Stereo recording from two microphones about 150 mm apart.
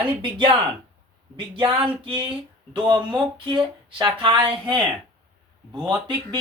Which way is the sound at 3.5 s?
30° right (ahead or behind).